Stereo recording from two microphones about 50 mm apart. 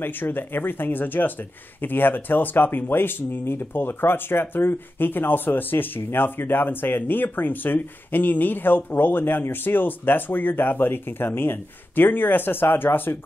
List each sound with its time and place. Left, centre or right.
0.0 s speech: left